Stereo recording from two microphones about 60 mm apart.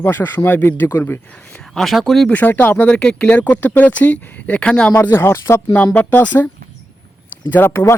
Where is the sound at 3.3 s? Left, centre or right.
Left.